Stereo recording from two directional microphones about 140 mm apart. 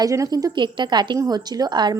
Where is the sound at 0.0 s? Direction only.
25° right (ahead or behind).